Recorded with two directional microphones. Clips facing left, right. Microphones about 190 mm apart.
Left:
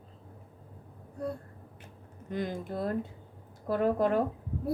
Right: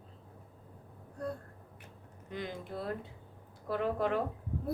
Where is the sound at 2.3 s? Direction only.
45° left (ahead or behind).